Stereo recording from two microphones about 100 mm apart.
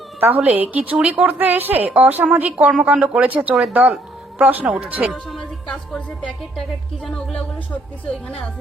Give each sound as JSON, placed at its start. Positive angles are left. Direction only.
{"t": 0.2, "sound": "a woman's voice", "side_deg": -15}
{"t": 5.1, "sound": "a woman's voice", "side_deg": 5}